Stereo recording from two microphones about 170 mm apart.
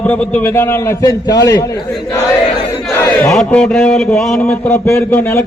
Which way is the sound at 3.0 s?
15° left (ahead or behind).